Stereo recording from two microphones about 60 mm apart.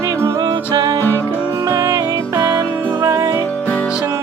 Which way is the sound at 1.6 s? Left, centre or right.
Right.